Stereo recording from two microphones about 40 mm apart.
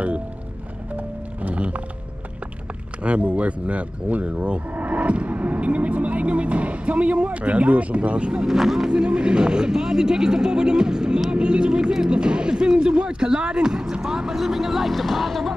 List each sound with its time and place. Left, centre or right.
0.9 s music: right
3.0 s speech: right
8.5 s speech: centre
8.9 s speech: right; by 15.5 s centre